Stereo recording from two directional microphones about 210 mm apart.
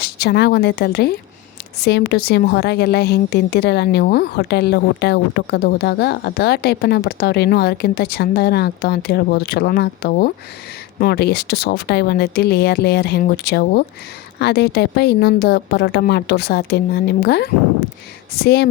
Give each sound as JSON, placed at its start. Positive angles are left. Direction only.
{"t": 0.0, "sound": "a woman's voice", "side_deg": 50}